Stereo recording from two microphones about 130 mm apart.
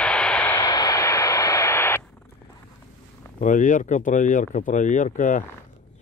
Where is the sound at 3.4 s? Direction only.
80° left.